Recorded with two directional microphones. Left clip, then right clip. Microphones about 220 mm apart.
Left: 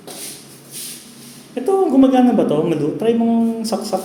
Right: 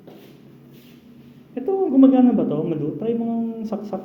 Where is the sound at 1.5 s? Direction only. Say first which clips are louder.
Left 5 dB; 15° left (ahead or behind).